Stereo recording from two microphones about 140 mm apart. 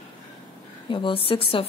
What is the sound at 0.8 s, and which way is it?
Speech, 35° left (ahead or behind).